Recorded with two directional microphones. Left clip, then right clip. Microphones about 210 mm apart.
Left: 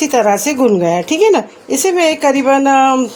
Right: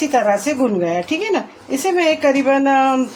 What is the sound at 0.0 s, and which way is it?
A woman's voice, 50° left (ahead or behind).